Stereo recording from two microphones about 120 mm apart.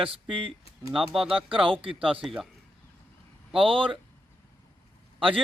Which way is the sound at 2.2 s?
5° right (ahead or behind).